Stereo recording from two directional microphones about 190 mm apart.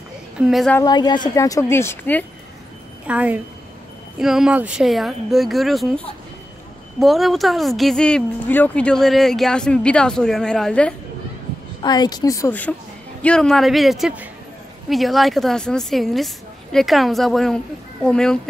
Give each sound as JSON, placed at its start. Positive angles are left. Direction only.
{"t": 0.4, "sound": "speech", "side_deg": 0}
{"t": 0.7, "sound": "a woman's voice", "side_deg": 20}
{"t": 3.1, "sound": "a woman's voice", "side_deg": -5}
{"t": 11.8, "sound": "a woman's voice", "side_deg": 20}